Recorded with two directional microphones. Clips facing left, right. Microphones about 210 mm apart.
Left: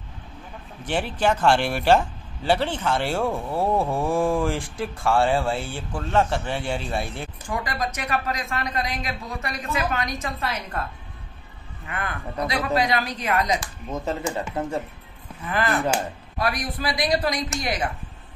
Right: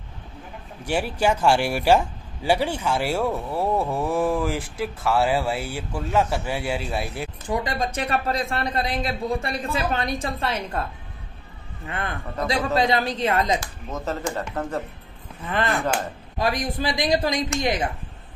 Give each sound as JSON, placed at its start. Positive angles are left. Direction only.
{"t": 0.8, "sound": "a man's voice", "side_deg": -10}
{"t": 7.4, "sound": "a woman's voice", "side_deg": -20}
{"t": 11.9, "sound": "speech", "side_deg": -25}
{"t": 13.8, "sound": "speech", "side_deg": 10}
{"t": 16.3, "sound": "speech", "side_deg": -25}